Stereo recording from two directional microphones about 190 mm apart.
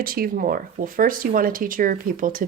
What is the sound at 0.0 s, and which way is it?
Speech, 50° right (ahead or behind).